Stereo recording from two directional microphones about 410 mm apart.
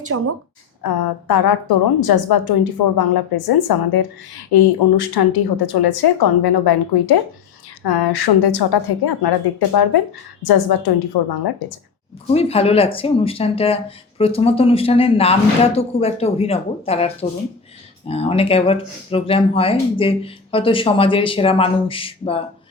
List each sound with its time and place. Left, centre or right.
0.1 s speech: right
0.8 s a woman's voice: left
12.3 s speech: centre